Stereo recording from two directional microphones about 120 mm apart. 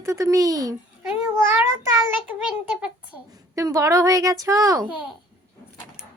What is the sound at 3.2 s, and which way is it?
A woman's voice, 30° right (ahead or behind).